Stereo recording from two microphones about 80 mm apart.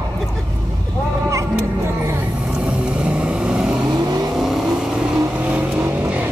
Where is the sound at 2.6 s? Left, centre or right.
Centre.